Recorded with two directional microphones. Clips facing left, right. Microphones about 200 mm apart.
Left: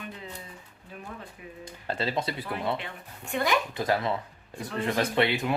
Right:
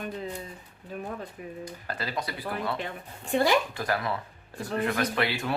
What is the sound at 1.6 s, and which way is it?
Speech, 25° left (ahead or behind).